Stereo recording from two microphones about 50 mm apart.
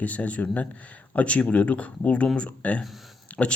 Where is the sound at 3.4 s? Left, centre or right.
Centre.